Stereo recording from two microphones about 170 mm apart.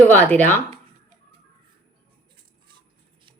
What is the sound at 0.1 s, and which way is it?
Speech, 10° left (ahead or behind).